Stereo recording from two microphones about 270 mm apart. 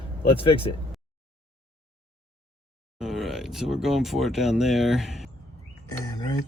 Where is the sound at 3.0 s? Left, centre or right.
Centre.